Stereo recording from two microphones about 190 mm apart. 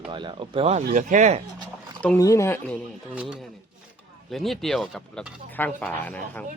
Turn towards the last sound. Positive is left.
turn(degrees=10)  # may be behind; listen again after turning